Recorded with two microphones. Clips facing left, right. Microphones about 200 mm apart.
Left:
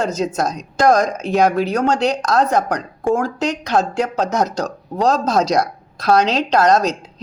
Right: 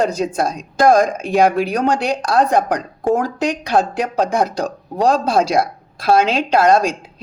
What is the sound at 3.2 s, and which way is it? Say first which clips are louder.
A woman's voice: right 1 dB; 15° right (ahead or behind).